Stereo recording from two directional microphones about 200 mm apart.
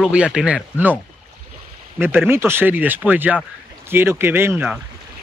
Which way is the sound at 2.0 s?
10° right (ahead or behind).